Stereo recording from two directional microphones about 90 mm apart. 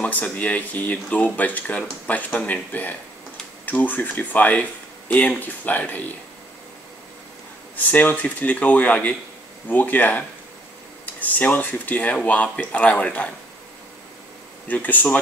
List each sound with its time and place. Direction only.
0.0 s speech: 15° left (ahead or behind)
7.7 s speech: 20° left (ahead or behind)
14.7 s speech: 20° left (ahead or behind)